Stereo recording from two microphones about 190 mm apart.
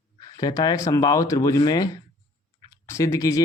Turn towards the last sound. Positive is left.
turn(degrees=15)  # may be behind; listen again after turning